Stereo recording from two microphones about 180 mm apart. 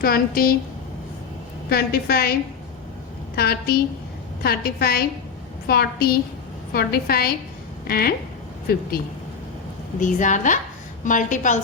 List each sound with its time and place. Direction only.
0.0 s a woman's voice: 55° left (ahead or behind)
1.7 s a woman's voice: 60° left (ahead or behind)
3.3 s a woman's voice: 60° left (ahead or behind)
10.0 s a woman's voice: 45° left (ahead or behind)